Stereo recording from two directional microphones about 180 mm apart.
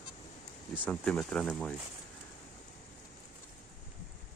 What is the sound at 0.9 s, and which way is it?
Speech, 5° left (ahead or behind).